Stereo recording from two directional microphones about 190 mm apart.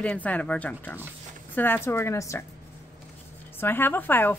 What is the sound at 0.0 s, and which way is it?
Speech, 5° left (ahead or behind).